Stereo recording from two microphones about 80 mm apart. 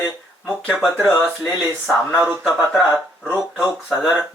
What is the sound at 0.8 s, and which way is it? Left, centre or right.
Speech, centre.